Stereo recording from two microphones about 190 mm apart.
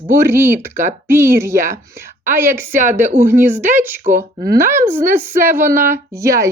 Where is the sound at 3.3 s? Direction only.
45° right (ahead or behind).